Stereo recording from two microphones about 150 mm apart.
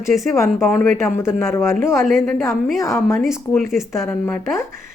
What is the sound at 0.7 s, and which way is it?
Speech, 10° left (ahead or behind).